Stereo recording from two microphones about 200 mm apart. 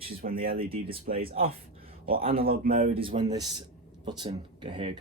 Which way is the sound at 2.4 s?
45° right (ahead or behind).